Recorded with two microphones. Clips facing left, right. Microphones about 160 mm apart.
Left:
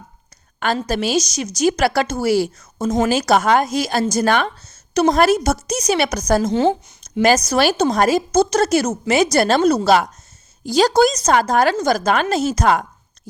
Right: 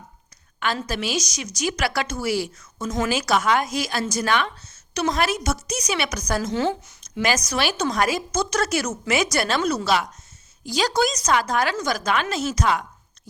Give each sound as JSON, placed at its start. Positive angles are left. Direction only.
{"t": 0.9, "sound": "speech", "side_deg": 35}
{"t": 3.4, "sound": "a woman's voice", "side_deg": 45}
{"t": 3.8, "sound": "speech", "side_deg": 35}